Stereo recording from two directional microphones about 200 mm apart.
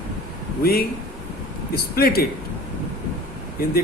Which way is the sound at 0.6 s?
50° left (ahead or behind).